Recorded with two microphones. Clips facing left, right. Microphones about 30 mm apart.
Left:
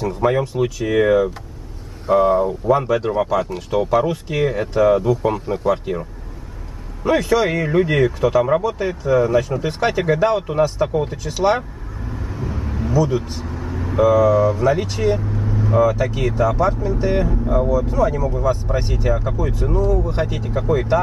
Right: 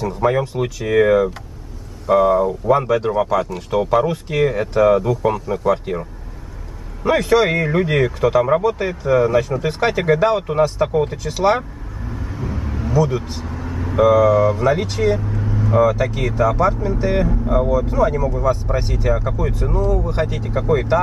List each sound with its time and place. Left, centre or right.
0.0 s speech: centre
2.4 s speech: centre
17.5 s speech: centre
17.8 s speech: centre